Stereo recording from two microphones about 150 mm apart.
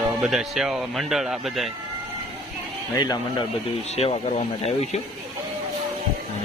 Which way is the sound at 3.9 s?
40° left (ahead or behind).